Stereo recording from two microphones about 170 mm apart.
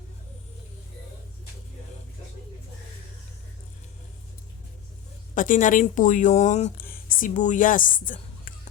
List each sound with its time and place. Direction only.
5.3 s a woman's voice: 50° left (ahead or behind)
6.7 s speech: 55° left (ahead or behind)